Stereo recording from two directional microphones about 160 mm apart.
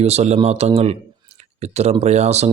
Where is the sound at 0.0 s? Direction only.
40° right (ahead or behind).